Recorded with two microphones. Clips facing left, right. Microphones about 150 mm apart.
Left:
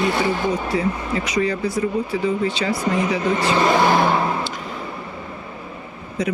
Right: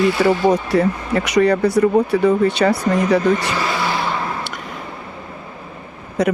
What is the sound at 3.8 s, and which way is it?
Vehicle, 50° left (ahead or behind).